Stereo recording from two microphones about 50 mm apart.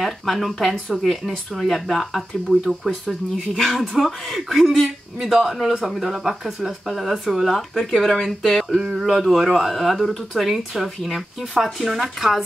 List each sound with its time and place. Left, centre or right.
0.0 s speech: centre
8.6 s speech: centre